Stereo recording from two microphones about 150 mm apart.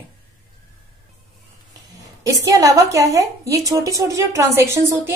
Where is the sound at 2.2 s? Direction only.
20° right (ahead or behind).